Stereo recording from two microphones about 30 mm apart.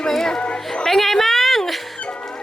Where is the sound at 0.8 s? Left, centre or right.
Centre.